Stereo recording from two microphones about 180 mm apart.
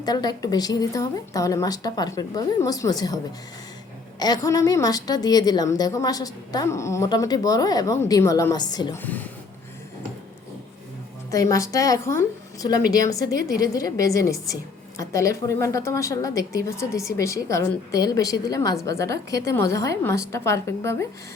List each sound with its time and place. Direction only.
0.0 s a woman's voice: 20° left (ahead or behind)
4.2 s a woman's voice: 20° left (ahead or behind)
9.0 s a woman's voice: 10° left (ahead or behind)
11.3 s a woman's voice: 20° left (ahead or behind)